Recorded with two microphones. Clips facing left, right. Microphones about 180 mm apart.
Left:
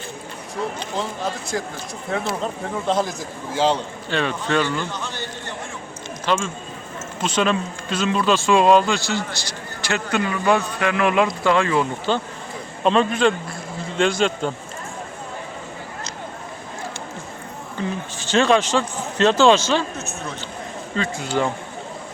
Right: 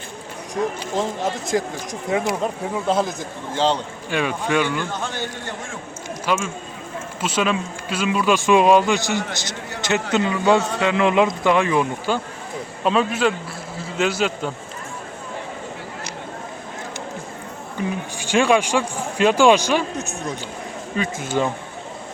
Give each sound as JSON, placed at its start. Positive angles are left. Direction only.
{"t": 0.5, "sound": "speech", "side_deg": -20}
{"t": 2.8, "sound": "a man's voice", "side_deg": 0}
{"t": 4.1, "sound": "speech", "side_deg": -10}
{"t": 4.9, "sound": "a man's voice", "side_deg": -50}
{"t": 6.2, "sound": "a man's voice", "side_deg": -10}
{"t": 17.7, "sound": "speech", "side_deg": -15}